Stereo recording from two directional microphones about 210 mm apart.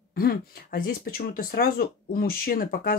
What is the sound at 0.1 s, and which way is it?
Speech, 45° left (ahead or behind).